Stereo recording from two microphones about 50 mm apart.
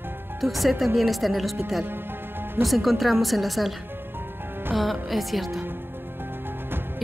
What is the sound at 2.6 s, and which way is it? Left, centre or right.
Speech, centre.